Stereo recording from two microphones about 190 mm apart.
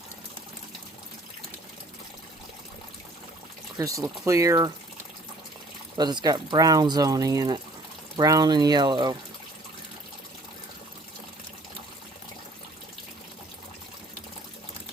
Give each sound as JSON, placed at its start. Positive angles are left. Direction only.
{"t": 3.8, "sound": "speech", "side_deg": -15}
{"t": 6.0, "sound": "speech", "side_deg": -20}